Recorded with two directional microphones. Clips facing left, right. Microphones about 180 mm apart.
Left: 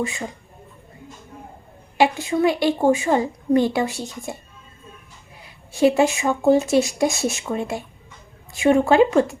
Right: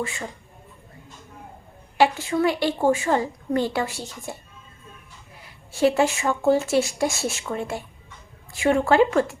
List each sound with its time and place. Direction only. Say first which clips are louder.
0.0 s a woman's voice: left 4 dB; 20° left (ahead or behind)
2.0 s a woman's voice: left 2 dB; 15° left (ahead or behind)
5.7 s a woman's voice: left 3 dB; 15° left (ahead or behind)